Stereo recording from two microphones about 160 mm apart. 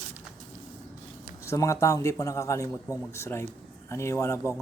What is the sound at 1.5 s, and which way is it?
A man's voice, 20° left (ahead or behind).